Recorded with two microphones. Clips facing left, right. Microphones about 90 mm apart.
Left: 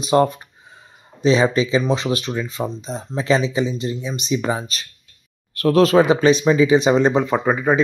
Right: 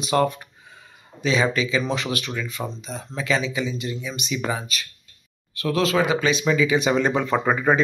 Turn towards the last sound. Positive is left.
turn(degrees=10)  # may be behind; listen again after turning